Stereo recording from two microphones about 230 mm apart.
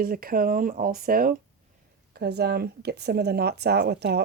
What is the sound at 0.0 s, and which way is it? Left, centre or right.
Speech, right.